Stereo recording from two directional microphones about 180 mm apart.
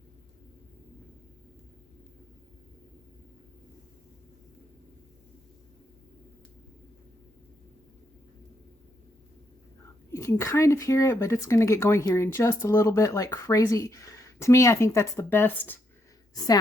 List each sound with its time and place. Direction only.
10.1 s speech: 15° left (ahead or behind)